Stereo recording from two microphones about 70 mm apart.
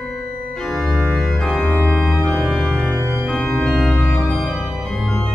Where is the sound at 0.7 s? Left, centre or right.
Centre.